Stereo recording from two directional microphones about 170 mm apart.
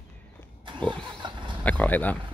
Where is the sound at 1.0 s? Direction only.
30° right (ahead or behind).